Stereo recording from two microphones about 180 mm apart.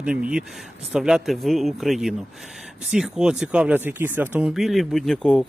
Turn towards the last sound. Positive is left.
turn(degrees=5)  # may be behind; listen again after turning